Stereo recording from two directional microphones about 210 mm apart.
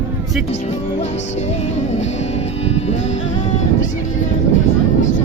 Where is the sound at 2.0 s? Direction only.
30° left (ahead or behind).